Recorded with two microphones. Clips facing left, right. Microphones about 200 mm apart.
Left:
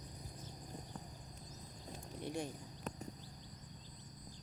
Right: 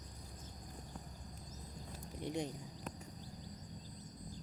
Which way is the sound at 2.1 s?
15° right (ahead or behind).